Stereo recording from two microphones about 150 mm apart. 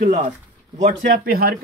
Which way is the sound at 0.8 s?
80° right.